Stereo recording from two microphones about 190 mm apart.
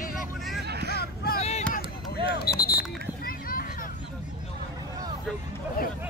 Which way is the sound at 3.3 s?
50° left (ahead or behind).